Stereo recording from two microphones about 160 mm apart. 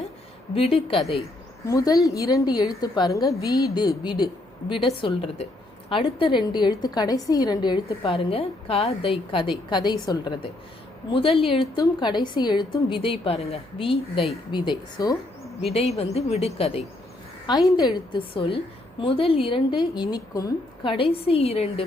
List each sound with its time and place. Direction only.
0.5 s a woman's voice: 35° left (ahead or behind)
1.6 s a woman's voice: 20° left (ahead or behind)
15.6 s a woman's voice: 40° left (ahead or behind)
17.7 s a woman's voice: 25° left (ahead or behind)